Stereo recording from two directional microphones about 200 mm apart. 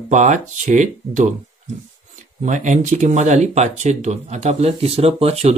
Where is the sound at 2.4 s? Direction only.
35° right (ahead or behind).